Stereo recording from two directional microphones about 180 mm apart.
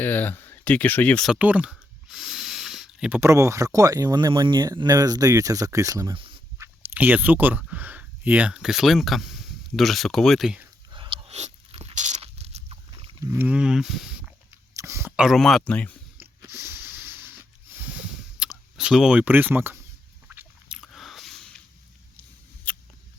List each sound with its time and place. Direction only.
0.0 s speech: 10° left (ahead or behind)
1.3 s speech: 10° right (ahead or behind); by 6.3 s 25° right (ahead or behind)
6.6 s speech: 10° right (ahead or behind)
10.9 s crunch: 30° right (ahead or behind)
13.3 s speech: 10° right (ahead or behind)
14.7 s speech: 15° right (ahead or behind); by 16.0 s 10° left (ahead or behind)
16.2 s a sound: 15° right (ahead or behind)
18.3 s speech: 5° right (ahead or behind)
20.2 s a sound: 10° right (ahead or behind)
22.7 s mouse: 5° left (ahead or behind)